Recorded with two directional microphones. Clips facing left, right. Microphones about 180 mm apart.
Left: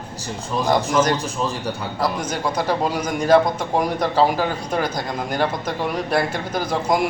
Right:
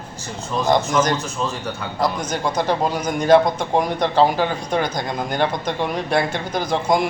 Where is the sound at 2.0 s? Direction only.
5° left (ahead or behind).